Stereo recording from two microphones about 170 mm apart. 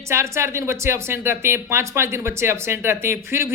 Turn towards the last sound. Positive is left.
turn(degrees=-15)  # may be behind; listen again after turning